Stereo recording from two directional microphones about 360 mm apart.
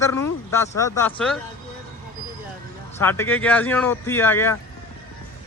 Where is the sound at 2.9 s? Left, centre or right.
Centre.